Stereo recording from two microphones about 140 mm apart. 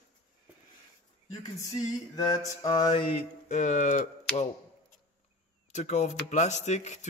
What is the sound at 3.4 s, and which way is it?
Speech, 60° left (ahead or behind).